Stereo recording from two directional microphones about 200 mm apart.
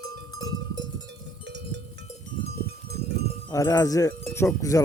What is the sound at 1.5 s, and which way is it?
Cowbell, 60° right (ahead or behind).